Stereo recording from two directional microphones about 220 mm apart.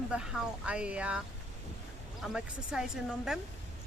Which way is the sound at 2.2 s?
Centre (ahead or behind).